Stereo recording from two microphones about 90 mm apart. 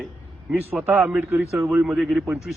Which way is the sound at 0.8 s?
20° right (ahead or behind).